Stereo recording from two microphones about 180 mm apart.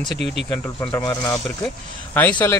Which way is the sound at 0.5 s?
15° left (ahead or behind).